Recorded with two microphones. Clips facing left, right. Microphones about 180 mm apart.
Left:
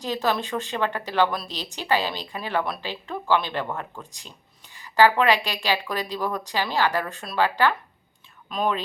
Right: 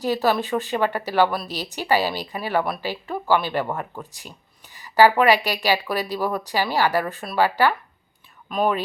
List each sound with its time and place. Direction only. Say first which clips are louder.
0.0 s speech: right 4 dB; 10° right (ahead or behind)